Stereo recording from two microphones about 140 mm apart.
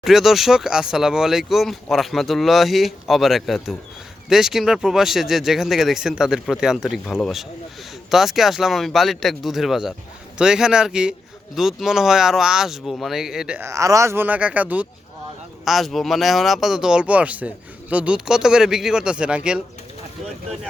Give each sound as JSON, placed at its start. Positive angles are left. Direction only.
{"t": 0.0, "sound": "speech", "side_deg": 0}
{"t": 13.6, "sound": "speech", "side_deg": -20}